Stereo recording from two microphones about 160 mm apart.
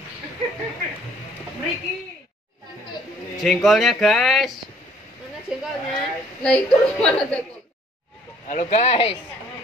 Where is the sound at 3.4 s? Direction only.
Centre (ahead or behind).